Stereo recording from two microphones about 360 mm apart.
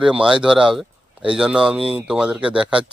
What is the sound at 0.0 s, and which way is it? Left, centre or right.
Speech, centre.